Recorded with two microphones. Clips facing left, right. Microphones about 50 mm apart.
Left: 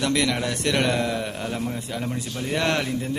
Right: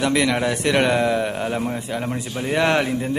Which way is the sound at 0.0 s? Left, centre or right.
Centre.